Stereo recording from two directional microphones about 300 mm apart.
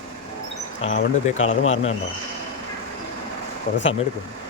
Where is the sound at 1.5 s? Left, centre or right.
Left.